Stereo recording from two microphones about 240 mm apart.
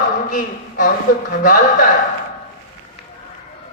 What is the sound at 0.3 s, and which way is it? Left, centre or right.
Speech, left.